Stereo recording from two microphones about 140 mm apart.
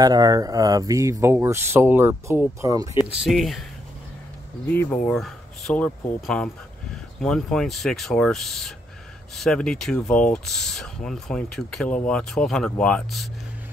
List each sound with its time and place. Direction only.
0.0 s speech: 30° right (ahead or behind)
3.0 s speech: centre (ahead or behind)
4.6 s speech: 10° left (ahead or behind)